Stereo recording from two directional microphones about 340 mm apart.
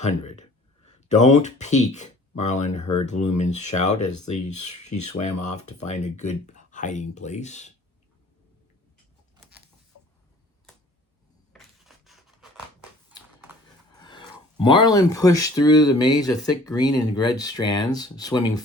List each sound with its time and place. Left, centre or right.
0.0 s speech: centre
3.9 s speech: left
5.0 s speech: centre
11.5 s scissors: centre
14.0 s speech: centre